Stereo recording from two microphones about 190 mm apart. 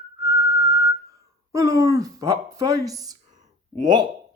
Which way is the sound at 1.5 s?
15° right (ahead or behind).